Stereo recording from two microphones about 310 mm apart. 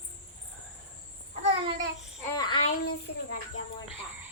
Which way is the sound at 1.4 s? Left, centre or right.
Centre.